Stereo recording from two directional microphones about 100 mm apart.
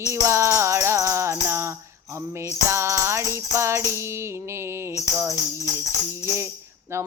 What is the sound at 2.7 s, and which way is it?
Music, 30° right (ahead or behind).